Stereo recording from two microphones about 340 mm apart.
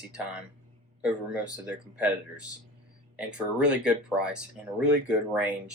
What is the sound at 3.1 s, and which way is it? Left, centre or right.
Speech, centre.